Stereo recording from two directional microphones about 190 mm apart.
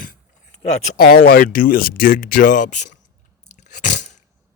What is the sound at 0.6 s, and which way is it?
Speech, 35° left (ahead or behind).